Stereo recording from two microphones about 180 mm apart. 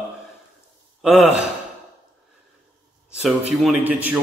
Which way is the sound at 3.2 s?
Centre (ahead or behind).